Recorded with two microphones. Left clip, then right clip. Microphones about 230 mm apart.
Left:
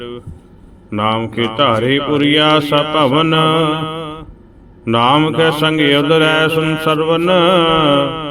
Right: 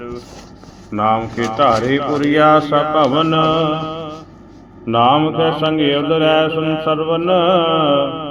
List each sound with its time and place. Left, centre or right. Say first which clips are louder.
0.9 s mantra: even; left